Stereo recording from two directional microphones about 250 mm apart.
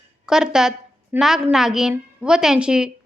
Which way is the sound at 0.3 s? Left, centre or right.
Centre.